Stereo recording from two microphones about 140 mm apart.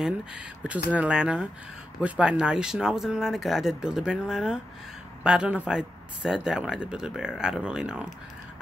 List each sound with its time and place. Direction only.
0.0 s speech: 5° right (ahead or behind)